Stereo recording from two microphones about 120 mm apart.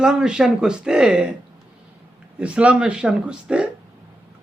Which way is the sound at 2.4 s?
10° right (ahead or behind).